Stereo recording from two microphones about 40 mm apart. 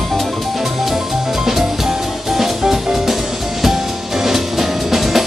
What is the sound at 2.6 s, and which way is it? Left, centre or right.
Music, centre.